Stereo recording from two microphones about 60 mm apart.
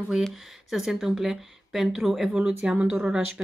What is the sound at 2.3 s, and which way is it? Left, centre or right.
Speech, centre.